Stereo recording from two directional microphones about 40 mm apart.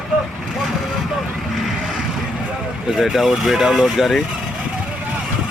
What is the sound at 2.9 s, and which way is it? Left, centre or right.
Speech, centre.